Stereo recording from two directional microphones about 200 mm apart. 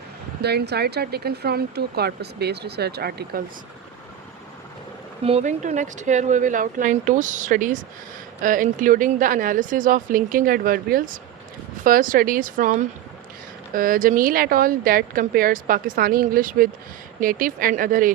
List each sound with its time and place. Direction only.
0.4 s speech: 55° right (ahead or behind)
5.2 s speech: 35° right (ahead or behind)